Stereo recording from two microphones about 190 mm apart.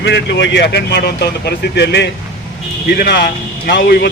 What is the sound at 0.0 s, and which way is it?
Speech, 65° left (ahead or behind).